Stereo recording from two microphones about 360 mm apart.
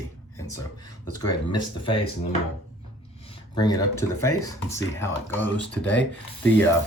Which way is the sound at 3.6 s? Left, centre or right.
Centre.